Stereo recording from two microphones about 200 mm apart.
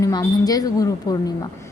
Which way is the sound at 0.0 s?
20° left (ahead or behind).